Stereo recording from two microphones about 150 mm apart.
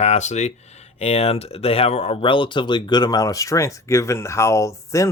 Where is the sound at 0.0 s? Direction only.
50° left (ahead or behind).